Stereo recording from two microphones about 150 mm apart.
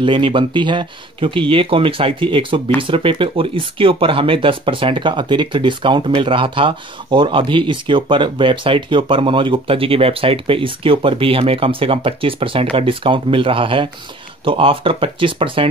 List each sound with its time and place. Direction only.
0.0 s speech: 35° right (ahead or behind)